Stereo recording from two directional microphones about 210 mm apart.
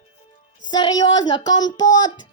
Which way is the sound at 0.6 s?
20° left (ahead or behind).